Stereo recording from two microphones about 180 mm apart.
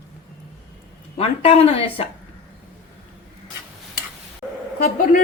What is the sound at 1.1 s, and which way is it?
Speech, 35° left (ahead or behind).